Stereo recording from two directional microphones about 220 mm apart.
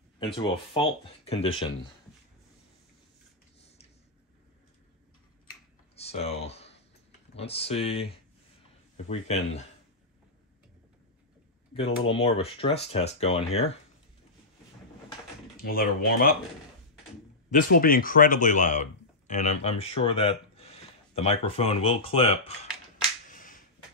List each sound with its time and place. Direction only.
0.2 s speech: 20° left (ahead or behind)
5.9 s a sound: 30° left (ahead or behind)
7.3 s speech: 25° left (ahead or behind)
11.7 s speech: 25° left (ahead or behind)
15.5 s speech: 40° left (ahead or behind)
17.5 s speech: 40° left (ahead or behind)
23.3 s a sound: 35° left (ahead or behind)